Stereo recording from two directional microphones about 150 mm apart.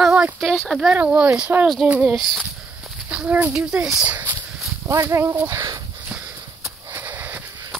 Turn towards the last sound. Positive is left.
turn(degrees=-10)  # may be behind; listen again after turning